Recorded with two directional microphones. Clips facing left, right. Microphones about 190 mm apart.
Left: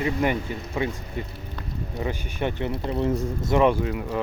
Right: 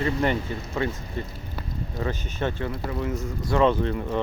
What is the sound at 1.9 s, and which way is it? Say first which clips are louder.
Speech: even; 15° left (ahead or behind).